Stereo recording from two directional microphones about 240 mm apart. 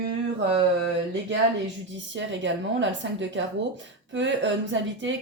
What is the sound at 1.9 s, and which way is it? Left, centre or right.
Speech, right.